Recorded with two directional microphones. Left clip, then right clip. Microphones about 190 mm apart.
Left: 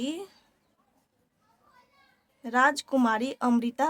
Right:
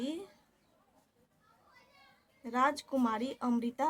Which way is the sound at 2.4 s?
40° left (ahead or behind).